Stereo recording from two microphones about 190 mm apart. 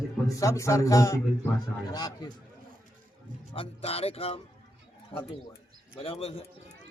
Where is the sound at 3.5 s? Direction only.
30° left (ahead or behind).